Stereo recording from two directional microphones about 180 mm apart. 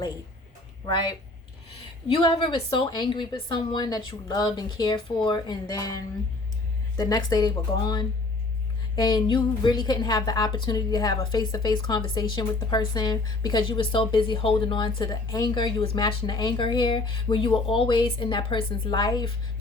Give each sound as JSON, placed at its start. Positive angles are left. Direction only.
{"t": 2.4, "sound": "a woman's voice", "side_deg": 25}